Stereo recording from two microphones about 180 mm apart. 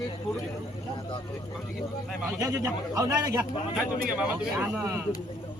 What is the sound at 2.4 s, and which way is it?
A man's voice, 20° right (ahead or behind).